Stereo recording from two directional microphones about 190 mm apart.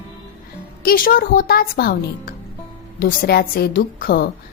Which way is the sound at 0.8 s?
50° left (ahead or behind).